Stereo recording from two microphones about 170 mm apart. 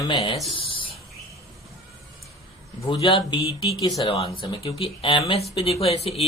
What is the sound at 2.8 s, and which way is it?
A man's voice, 30° left (ahead or behind).